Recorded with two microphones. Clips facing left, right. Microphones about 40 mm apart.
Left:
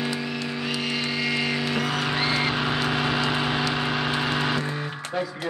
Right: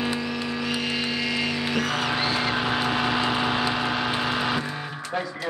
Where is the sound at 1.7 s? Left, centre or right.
Centre.